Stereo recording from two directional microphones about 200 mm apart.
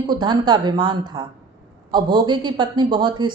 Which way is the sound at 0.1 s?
20° right (ahead or behind).